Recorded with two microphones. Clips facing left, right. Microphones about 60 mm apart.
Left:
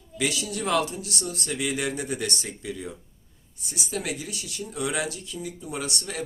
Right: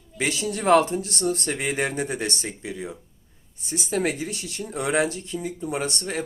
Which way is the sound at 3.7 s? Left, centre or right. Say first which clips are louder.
Right 6 dB; right.